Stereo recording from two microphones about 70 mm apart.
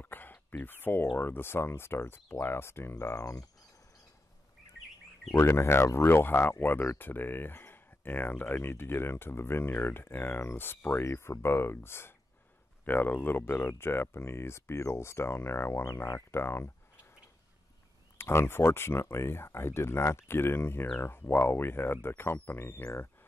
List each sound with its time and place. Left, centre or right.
0.0 s a sound: left
1.1 s speech: left
5.4 s speech: left
18.1 s speech: left